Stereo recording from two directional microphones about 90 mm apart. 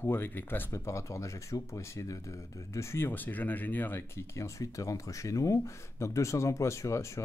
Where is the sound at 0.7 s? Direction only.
35° left (ahead or behind).